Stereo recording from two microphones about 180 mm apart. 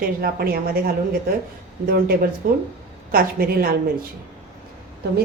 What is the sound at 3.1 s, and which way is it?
Speech, 55° right (ahead or behind).